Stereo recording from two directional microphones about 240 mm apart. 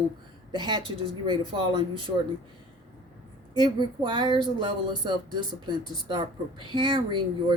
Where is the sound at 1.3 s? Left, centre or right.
Centre.